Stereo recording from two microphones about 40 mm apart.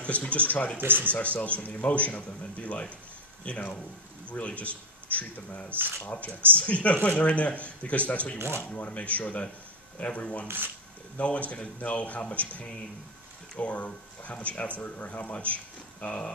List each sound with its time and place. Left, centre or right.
0.0 s a man's voice: left
0.7 s speech: right
1.1 s a man's voice: left
5.7 s speech: right
6.0 s a man's voice: left